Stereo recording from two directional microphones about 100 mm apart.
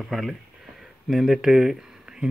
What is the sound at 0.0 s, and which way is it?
Speech, centre (ahead or behind).